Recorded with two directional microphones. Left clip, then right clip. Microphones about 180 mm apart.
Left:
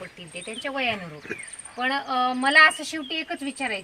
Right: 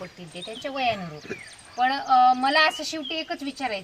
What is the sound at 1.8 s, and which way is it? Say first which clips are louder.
Speech: right 5 dB; 15° left (ahead or behind).